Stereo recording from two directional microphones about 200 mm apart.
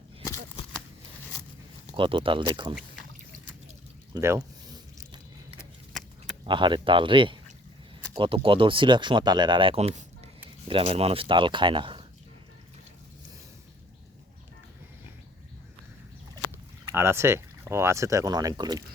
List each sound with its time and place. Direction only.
0.2 s a sound: 25° left (ahead or behind)
2.0 s speech: 25° right (ahead or behind)
4.1 s biting: 15° right (ahead or behind)
5.5 s a sound: centre (ahead or behind)
6.4 s speech: 25° right (ahead or behind)
16.9 s speech: 10° right (ahead or behind)